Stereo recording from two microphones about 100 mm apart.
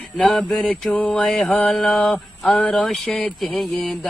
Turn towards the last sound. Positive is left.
turn(degrees=5)  # may be behind; listen again after turning